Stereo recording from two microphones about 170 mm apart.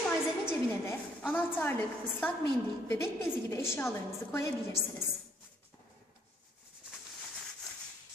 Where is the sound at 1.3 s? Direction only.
10° left (ahead or behind).